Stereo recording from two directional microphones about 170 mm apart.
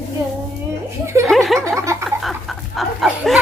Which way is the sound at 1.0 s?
15° right (ahead or behind).